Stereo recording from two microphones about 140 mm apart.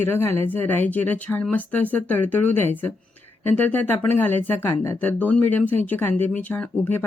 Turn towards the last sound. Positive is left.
turn(degrees=15)  # may be behind; listen again after turning